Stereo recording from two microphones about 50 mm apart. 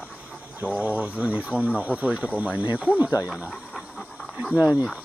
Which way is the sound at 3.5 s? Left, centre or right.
Centre.